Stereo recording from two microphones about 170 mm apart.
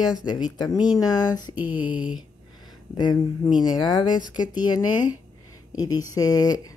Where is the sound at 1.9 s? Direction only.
25° left (ahead or behind).